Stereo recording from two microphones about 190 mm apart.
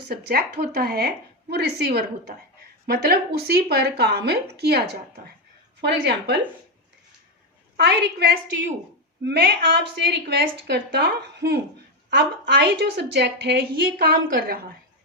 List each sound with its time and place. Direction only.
0.1 s a woman's voice: 55° right (ahead or behind)
5.8 s a woman's voice: 60° right (ahead or behind)
7.8 s a woman's voice: 60° right (ahead or behind)
14.0 s a woman's voice: 50° right (ahead or behind)